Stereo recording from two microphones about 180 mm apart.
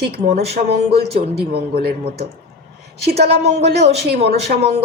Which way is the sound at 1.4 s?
60° right (ahead or behind).